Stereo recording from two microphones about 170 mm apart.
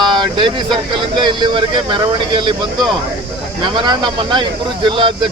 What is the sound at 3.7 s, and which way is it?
Speech, 30° right (ahead or behind).